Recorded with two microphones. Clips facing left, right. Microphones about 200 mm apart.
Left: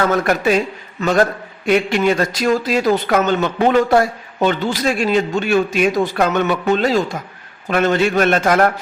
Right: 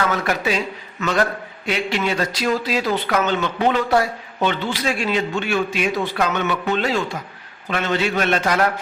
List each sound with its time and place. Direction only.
0.0 s speech: 45° left (ahead or behind)
1.0 s a man's voice: 35° left (ahead or behind)
1.6 s speech: 50° left (ahead or behind)